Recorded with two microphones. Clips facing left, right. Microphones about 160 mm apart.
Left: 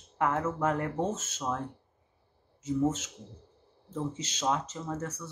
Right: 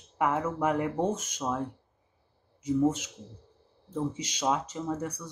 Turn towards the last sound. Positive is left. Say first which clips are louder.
# right 3 dB
turn(degrees=-10)  # may be behind; listen again after turning